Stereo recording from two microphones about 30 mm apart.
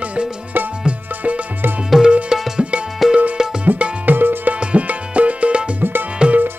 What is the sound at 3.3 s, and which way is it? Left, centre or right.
Music, right.